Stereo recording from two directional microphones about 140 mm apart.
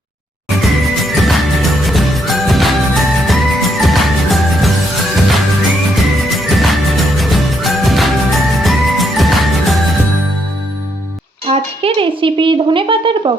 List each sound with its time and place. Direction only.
0.6 s music: centre (ahead or behind)
11.4 s speech: 45° right (ahead or behind)